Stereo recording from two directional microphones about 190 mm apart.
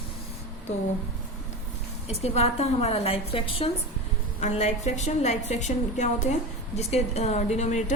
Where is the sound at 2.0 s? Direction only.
35° left (ahead or behind).